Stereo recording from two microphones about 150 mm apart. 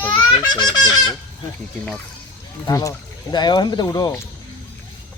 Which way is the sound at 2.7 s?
25° left (ahead or behind).